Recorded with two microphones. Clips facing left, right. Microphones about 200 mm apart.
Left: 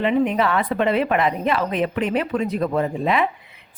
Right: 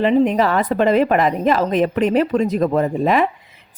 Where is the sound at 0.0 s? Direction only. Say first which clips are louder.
Right 4 dB; 35° right (ahead or behind).